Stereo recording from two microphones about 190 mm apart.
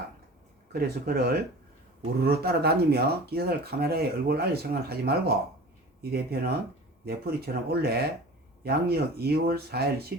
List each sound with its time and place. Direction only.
0.7 s speech: 55° right (ahead or behind)